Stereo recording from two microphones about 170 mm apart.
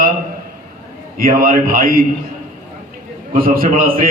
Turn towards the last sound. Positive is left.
turn(degrees=-55)  # may be behind; listen again after turning